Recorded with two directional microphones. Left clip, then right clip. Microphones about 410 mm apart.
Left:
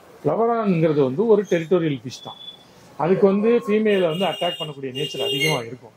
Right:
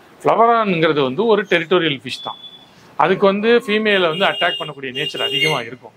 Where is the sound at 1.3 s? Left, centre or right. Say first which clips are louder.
Right 4 dB; centre.